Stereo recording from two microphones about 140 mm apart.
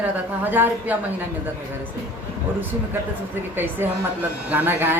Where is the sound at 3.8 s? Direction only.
15° right (ahead or behind).